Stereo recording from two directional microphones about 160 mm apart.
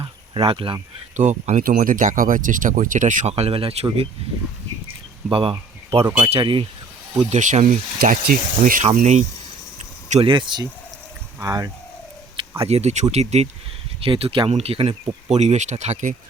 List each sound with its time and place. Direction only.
0.0 s a sound: 35° right (ahead or behind)
1.1 s speech: 45° right (ahead or behind)
5.3 s speech: 35° right (ahead or behind)
7.2 s speech: 45° right (ahead or behind)
9.0 s speech: 45° right (ahead or behind); by 11.7 s 20° right (ahead or behind)
12.4 s speech: 40° right (ahead or behind)